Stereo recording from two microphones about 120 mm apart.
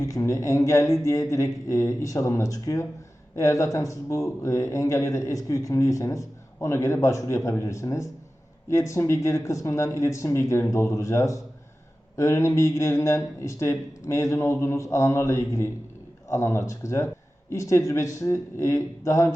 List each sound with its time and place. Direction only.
0.0 s speech: 25° left (ahead or behind)